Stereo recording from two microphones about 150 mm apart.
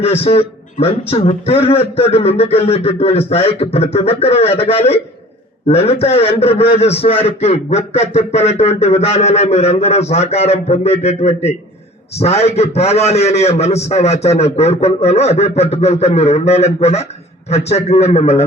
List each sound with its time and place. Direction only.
0.0 s a man's voice: 40° left (ahead or behind)